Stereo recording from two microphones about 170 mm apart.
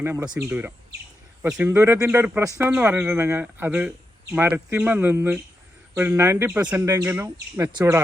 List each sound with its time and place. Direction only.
0.0 s speech: 15° right (ahead or behind)